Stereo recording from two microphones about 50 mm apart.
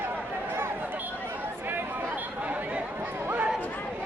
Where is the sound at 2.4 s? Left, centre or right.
Right.